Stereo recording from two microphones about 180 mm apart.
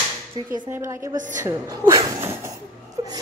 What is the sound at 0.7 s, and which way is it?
Speech, 15° right (ahead or behind).